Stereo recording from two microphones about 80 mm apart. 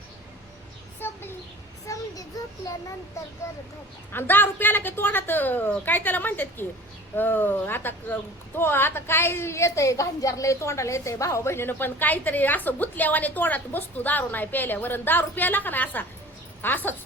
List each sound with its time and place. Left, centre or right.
0.9 s a sound: left
1.9 s child singing: left
2.3 s a child's voice: left
3.4 s speech: left
4.1 s a woman's voice: left